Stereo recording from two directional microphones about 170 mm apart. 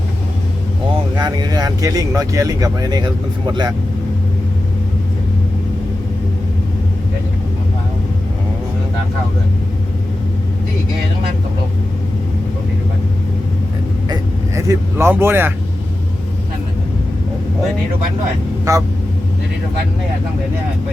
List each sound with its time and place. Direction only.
1.1 s speech: 25° right (ahead or behind)
14.1 s a sound: 20° right (ahead or behind)
18.7 s speech: 20° right (ahead or behind)